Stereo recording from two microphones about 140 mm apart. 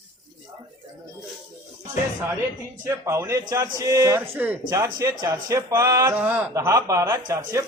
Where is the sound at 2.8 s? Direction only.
20° right (ahead or behind).